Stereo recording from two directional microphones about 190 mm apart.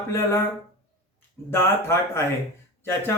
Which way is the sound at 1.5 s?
15° left (ahead or behind).